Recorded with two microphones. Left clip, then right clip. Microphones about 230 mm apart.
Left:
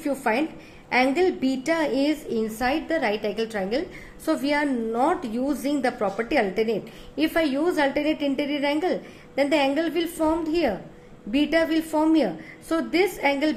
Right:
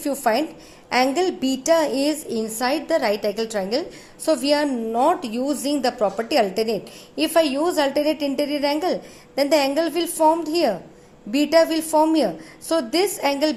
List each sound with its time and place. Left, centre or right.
0.0 s a woman's voice: centre